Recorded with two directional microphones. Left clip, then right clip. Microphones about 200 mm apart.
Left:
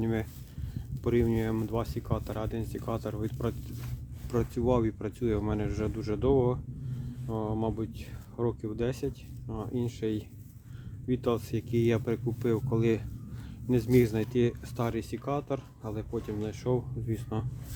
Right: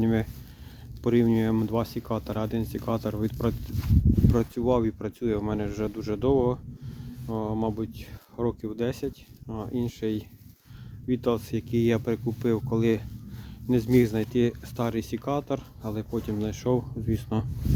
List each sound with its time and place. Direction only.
0.0 s speech: 40° right (ahead or behind)